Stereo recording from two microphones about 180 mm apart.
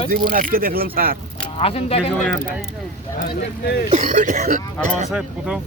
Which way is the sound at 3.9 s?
45° right (ahead or behind).